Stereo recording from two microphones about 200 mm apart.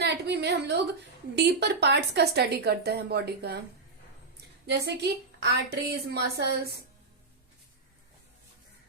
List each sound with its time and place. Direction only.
0.0 s a sound: 55° right (ahead or behind)
1.4 s speech: 55° right (ahead or behind)
4.6 s a woman's voice: 55° right (ahead or behind)